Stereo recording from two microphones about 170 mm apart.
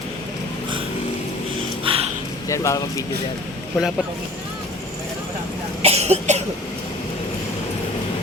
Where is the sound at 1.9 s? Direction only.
30° right (ahead or behind).